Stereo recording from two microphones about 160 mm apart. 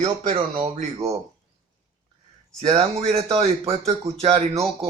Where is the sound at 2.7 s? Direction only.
40° right (ahead or behind).